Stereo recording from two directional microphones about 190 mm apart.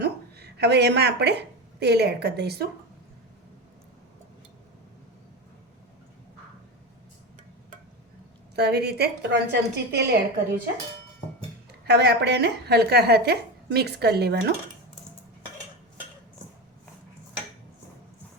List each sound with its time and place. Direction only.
0.0 s a woman's voice: 60° right (ahead or behind)
8.5 s a woman's voice: 60° right (ahead or behind)
11.9 s a woman's voice: 60° right (ahead or behind)